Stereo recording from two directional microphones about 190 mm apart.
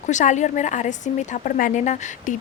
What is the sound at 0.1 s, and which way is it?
A woman's voice, 40° left (ahead or behind).